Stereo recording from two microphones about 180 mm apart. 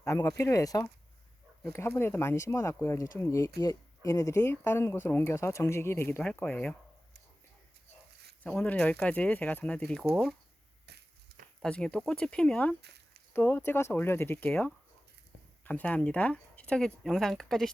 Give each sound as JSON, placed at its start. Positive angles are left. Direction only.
{"t": 0.0, "sound": "speech", "side_deg": 15}
{"t": 8.4, "sound": "speech", "side_deg": 10}
{"t": 10.8, "sound": "crushing", "side_deg": -65}
{"t": 11.6, "sound": "speech", "side_deg": 5}
{"t": 12.8, "sound": "a sound", "side_deg": -65}
{"t": 13.3, "sound": "speech", "side_deg": 10}